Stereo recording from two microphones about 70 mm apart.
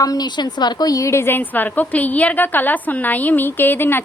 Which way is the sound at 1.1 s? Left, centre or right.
Left.